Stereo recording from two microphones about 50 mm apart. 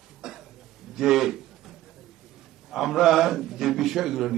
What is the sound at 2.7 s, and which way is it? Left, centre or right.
A man's voice, centre.